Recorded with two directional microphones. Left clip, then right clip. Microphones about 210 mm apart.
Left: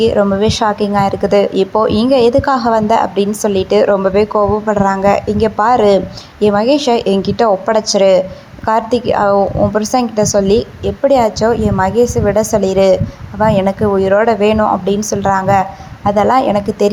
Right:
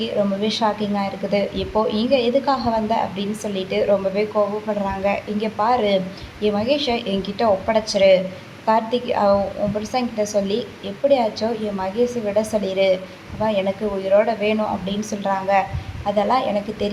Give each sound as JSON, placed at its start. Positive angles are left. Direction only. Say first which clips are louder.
{"t": 0.0, "sound": "a woman's voice", "louder": "left 10 dB", "side_deg": 40}